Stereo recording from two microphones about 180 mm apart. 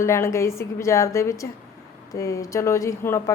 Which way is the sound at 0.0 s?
15° left (ahead or behind).